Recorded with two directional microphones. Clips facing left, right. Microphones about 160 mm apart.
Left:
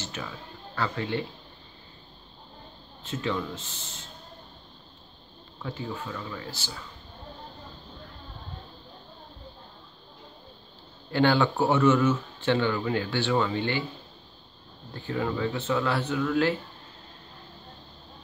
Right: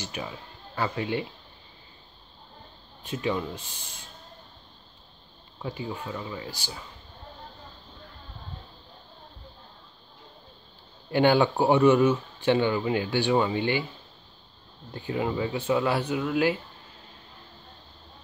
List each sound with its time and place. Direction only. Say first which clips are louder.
0.0 s music: right 2 dB; 15° right (ahead or behind)
0.7 s speech: right 1 dB; 15° right (ahead or behind)
3.0 s speech: right 1 dB; 15° right (ahead or behind)
5.6 s speech: right 1 dB; 15° right (ahead or behind)
11.1 s speech: right 2 dB; 15° right (ahead or behind)
15.0 s speech: right 1 dB; 20° right (ahead or behind)